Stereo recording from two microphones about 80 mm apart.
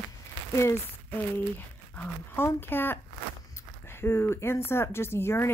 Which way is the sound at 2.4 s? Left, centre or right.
Left.